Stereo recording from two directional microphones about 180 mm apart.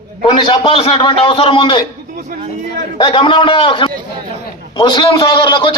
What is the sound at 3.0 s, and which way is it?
A man's voice, 25° left (ahead or behind).